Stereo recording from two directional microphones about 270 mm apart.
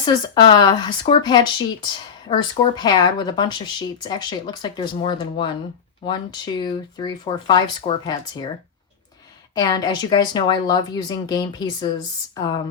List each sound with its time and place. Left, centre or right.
0.0 s speech: centre
9.6 s speech: centre